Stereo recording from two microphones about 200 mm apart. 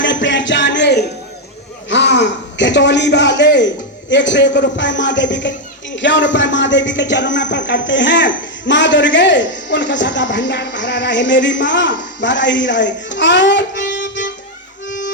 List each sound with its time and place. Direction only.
0.0 s music: 65° left (ahead or behind)
1.9 s a man's voice: 60° left (ahead or behind)